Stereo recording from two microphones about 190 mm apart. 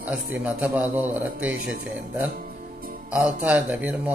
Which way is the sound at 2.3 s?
50° right (ahead or behind).